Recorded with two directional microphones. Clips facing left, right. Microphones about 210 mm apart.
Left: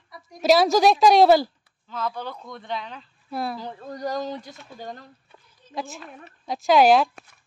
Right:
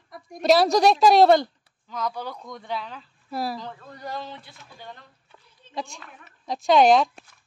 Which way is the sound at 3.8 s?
40° left (ahead or behind).